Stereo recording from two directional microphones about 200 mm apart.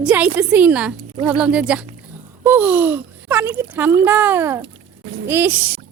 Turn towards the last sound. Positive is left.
turn(degrees=-10)  # may be behind; listen again after turning